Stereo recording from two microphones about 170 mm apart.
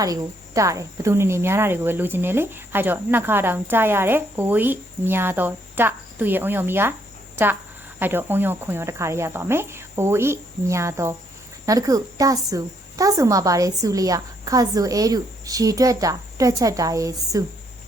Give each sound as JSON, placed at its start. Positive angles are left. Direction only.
{"t": 0.0, "sound": "speech", "side_deg": -20}
{"t": 7.9, "sound": "a woman's voice", "side_deg": -10}